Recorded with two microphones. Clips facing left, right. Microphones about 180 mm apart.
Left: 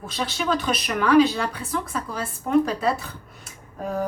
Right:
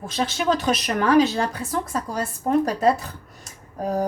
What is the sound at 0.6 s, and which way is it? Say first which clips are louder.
A woman's voice: right 2 dB; 45° right (ahead or behind).